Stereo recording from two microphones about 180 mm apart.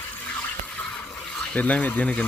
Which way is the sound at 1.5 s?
10° left (ahead or behind).